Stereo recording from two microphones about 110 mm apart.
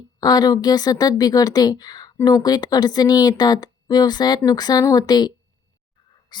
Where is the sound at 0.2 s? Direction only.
40° left (ahead or behind).